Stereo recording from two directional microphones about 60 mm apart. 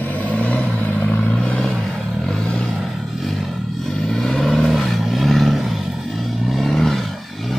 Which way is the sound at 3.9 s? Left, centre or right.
Centre.